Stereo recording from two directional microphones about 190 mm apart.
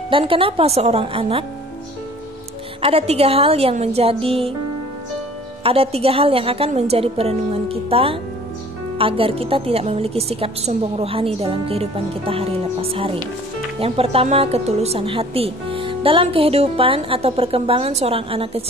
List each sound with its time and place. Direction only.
0.1 s speech: 30° right (ahead or behind)
2.8 s a woman's voice: 30° right (ahead or behind)
5.6 s a woman's voice: 30° right (ahead or behind)